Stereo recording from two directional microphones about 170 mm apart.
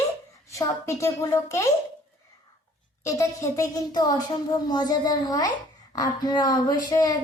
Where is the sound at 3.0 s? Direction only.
20° left (ahead or behind).